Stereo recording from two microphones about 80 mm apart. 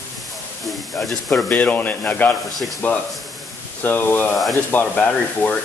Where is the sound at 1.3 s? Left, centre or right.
Centre.